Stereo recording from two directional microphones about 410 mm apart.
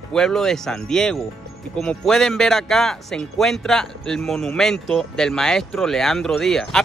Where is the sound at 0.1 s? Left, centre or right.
Centre.